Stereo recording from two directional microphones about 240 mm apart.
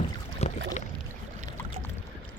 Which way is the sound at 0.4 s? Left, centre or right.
Left.